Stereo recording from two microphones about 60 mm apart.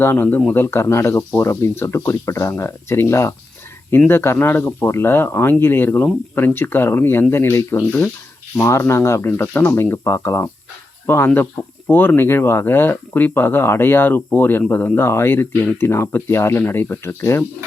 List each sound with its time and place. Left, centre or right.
0.0 s speech: left
14.9 s speech: left